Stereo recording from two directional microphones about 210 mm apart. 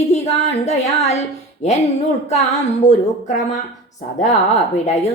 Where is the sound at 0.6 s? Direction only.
30° left (ahead or behind).